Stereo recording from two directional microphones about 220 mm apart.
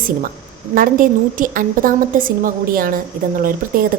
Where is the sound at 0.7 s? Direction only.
40° right (ahead or behind).